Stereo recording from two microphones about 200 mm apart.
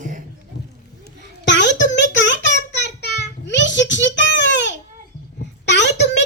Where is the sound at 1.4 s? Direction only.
60° left (ahead or behind).